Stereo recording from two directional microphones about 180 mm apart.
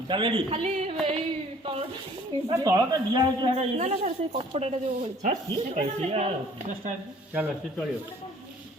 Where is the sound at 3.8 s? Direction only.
40° right (ahead or behind).